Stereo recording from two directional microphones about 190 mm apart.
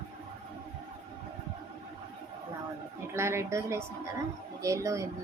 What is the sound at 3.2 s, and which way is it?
A woman's voice, 15° right (ahead or behind).